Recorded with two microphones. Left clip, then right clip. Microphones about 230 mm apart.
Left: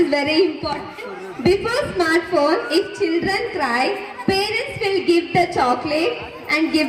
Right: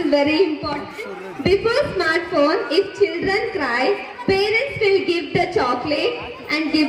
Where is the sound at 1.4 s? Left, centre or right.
Left.